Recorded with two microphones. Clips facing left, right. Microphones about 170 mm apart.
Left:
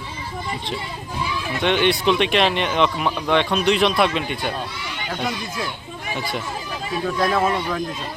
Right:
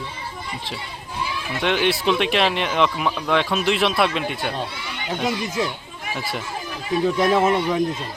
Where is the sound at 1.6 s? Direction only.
Centre (ahead or behind).